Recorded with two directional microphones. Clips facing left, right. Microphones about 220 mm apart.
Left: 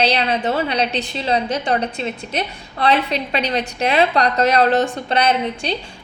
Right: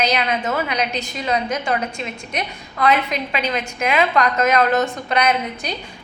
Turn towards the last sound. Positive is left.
turn(degrees=30)  # may be behind; listen again after turning